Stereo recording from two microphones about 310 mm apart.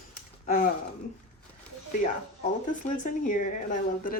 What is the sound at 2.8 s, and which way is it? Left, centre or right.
Speech, left.